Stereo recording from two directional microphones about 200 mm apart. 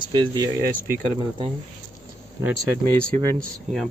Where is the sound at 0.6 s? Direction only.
50° right (ahead or behind).